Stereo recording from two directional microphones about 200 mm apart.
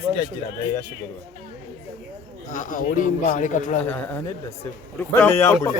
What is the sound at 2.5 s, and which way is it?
A man's voice, 40° left (ahead or behind).